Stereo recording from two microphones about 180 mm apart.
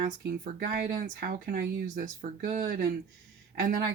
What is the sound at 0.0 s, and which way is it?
Speech, 55° right (ahead or behind).